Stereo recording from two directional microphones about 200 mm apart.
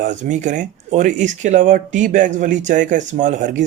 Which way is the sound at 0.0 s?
40° right (ahead or behind).